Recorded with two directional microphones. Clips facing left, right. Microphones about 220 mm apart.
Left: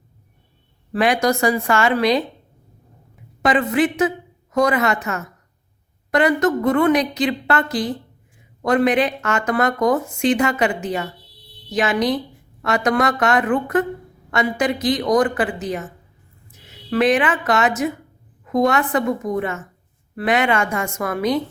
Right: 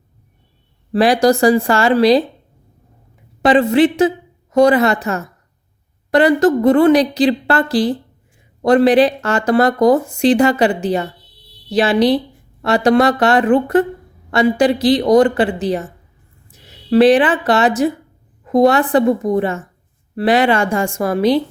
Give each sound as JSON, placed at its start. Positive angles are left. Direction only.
{"t": 0.9, "sound": "speech", "side_deg": -35}
{"t": 3.4, "sound": "a woman's voice", "side_deg": -30}